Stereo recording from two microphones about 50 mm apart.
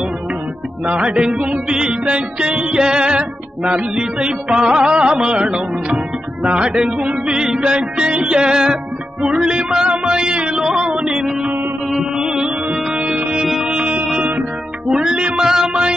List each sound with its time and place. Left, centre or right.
1.0 s music: centre
6.7 s music: centre; by 14.0 s right
14.9 s music: centre